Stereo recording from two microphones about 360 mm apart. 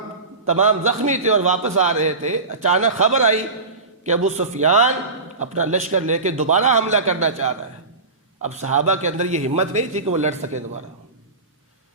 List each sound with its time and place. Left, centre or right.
0.5 s a man's voice: centre